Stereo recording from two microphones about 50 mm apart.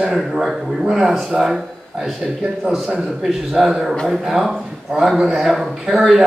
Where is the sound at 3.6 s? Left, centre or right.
Centre.